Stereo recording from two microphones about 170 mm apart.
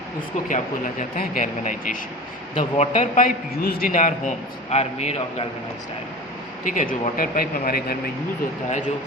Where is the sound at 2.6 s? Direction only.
40° left (ahead or behind).